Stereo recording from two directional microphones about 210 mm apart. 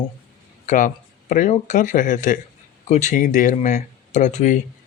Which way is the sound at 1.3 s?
35° left (ahead or behind).